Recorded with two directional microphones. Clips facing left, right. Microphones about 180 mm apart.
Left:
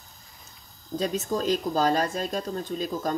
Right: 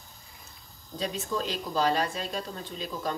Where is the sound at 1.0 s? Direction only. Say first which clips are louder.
Left 4 dB; 45° left (ahead or behind).